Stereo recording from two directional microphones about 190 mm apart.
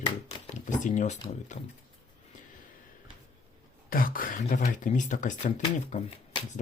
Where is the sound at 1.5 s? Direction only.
40° left (ahead or behind).